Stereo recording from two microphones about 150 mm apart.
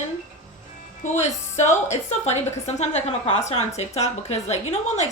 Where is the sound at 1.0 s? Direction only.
50° left (ahead or behind).